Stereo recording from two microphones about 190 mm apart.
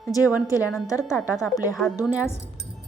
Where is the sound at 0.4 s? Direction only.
15° left (ahead or behind).